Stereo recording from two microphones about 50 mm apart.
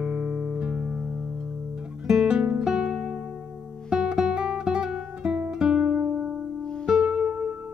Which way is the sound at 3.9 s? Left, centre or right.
Centre.